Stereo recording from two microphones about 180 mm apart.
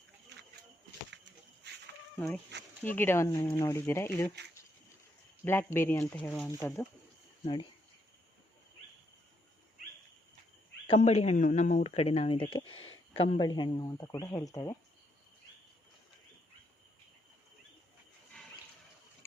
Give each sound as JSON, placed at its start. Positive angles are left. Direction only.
{"t": 2.1, "sound": "speech", "side_deg": 5}
{"t": 5.5, "sound": "speech", "side_deg": 10}
{"t": 10.8, "sound": "speech", "side_deg": 35}
{"t": 12.7, "sound": "a sound", "side_deg": 90}
{"t": 13.1, "sound": "speech", "side_deg": 35}